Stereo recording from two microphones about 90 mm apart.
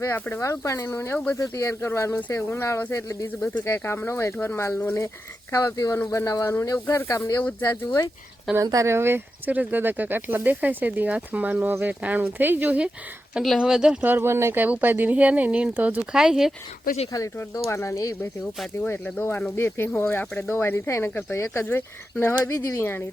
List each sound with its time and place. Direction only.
0.0 s speech: 30° left (ahead or behind)
3.4 s speech: 15° left (ahead or behind)
3.7 s speech: 30° left (ahead or behind)
8.6 s speech: 35° right (ahead or behind); by 12.9 s 15° right (ahead or behind)
13.4 s speech: 5° right (ahead or behind)
14.1 s speech: 25° right (ahead or behind)
14.6 s speech: 20° right (ahead or behind)
17.1 s speech: 40° left (ahead or behind)
18.8 s speech: 20° left (ahead or behind)
22.4 s speech: 35° left (ahead or behind)
22.8 s speech: 25° left (ahead or behind)